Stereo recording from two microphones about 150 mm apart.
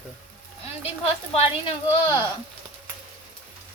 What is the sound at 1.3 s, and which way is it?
Speech, 40° left (ahead or behind).